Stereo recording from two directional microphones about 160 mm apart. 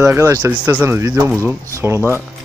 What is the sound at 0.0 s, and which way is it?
Speech, 15° right (ahead or behind).